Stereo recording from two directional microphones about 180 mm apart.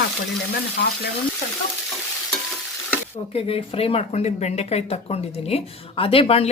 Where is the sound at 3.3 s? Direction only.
30° left (ahead or behind).